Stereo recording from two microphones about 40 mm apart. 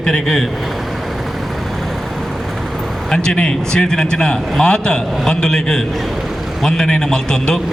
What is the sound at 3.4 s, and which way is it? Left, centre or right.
A man's voice, centre.